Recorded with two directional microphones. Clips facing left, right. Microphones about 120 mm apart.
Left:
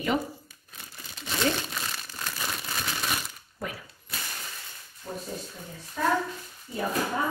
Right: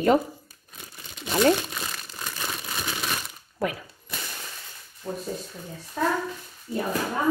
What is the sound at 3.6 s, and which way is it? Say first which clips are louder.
Speech: right 8 dB; 90° right.